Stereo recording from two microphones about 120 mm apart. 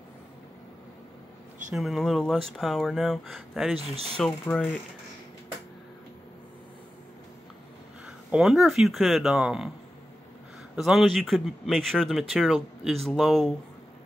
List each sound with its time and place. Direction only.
1.8 s speech: centre (ahead or behind)
4.5 s speech: 15° left (ahead or behind)
8.3 s speech: 5° right (ahead or behind)
10.8 s speech: centre (ahead or behind)